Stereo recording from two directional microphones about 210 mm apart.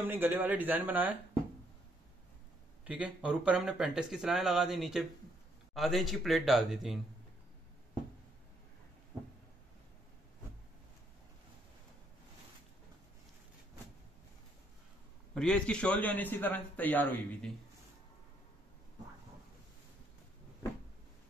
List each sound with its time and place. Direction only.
0.0 s speech: 10° right (ahead or behind)
2.8 s speech: 5° right (ahead or behind)
15.3 s a man's voice: 5° left (ahead or behind)